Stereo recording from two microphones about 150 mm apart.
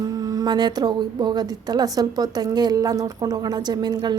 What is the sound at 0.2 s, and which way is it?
A woman's voice, 25° right (ahead or behind).